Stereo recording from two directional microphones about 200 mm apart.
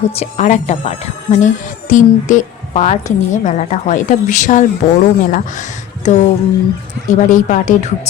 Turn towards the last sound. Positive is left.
turn(degrees=35)  # may be behind; listen again after turning